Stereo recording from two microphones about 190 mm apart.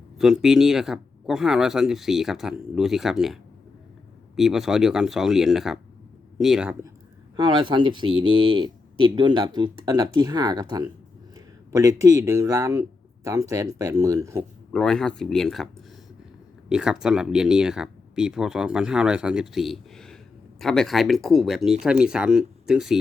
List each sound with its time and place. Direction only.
0.2 s speech: centre (ahead or behind)
7.3 s speech: 25° right (ahead or behind)
14.7 s speech: centre (ahead or behind)